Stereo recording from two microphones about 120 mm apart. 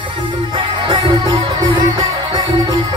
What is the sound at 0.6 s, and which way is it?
Music, 40° right (ahead or behind).